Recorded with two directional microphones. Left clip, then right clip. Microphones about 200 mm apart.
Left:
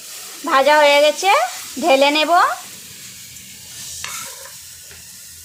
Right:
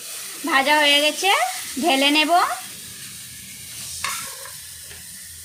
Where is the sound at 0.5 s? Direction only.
20° left (ahead or behind).